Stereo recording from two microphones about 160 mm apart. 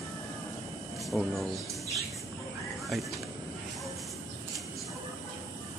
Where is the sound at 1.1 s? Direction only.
10° left (ahead or behind).